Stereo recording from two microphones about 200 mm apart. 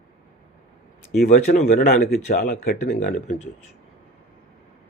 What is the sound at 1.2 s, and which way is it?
A man's voice, 35° left (ahead or behind).